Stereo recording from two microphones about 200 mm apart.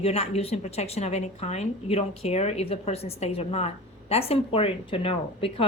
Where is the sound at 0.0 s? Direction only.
30° left (ahead or behind).